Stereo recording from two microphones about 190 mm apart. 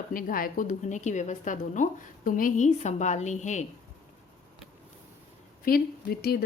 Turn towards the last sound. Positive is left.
turn(degrees=50)  # may be behind; listen again after turning